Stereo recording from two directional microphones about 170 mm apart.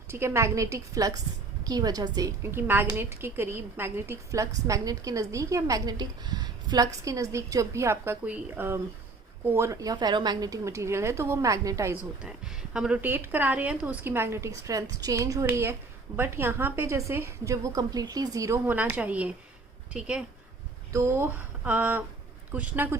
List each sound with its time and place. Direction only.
0.1 s a woman's voice: 15° right (ahead or behind)
12.7 s a woman's voice: 5° right (ahead or behind)
20.9 s a woman's voice: 15° right (ahead or behind)